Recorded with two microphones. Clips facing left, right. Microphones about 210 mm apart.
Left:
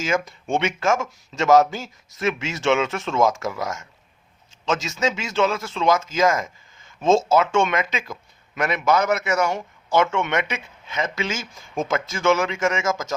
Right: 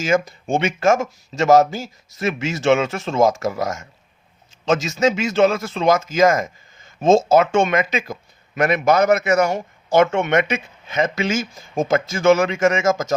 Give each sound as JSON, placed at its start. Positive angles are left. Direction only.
{"t": 0.4, "sound": "speech", "side_deg": -40}